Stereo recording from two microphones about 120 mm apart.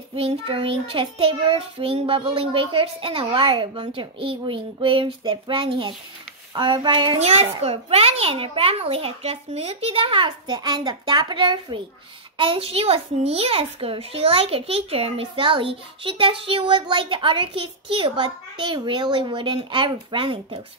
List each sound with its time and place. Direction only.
0.1 s child singing: 50° right (ahead or behind)
6.5 s speech: 40° right (ahead or behind)
7.2 s child singing: 60° right (ahead or behind); by 20.6 s 40° right (ahead or behind)